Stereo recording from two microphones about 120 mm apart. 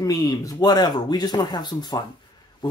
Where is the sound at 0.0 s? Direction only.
30° left (ahead or behind).